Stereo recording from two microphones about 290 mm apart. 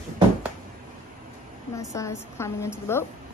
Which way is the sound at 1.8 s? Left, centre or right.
Centre.